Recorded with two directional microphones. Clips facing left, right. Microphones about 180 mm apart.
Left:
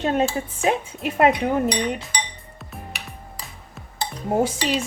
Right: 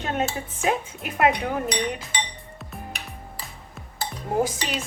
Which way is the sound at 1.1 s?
30° left (ahead or behind).